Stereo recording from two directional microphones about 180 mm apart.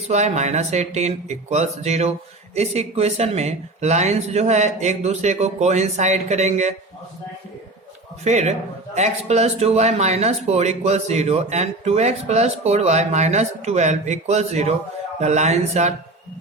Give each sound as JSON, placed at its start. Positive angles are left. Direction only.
{"t": 0.1, "sound": "speech", "side_deg": -40}
{"t": 8.2, "sound": "speech", "side_deg": -40}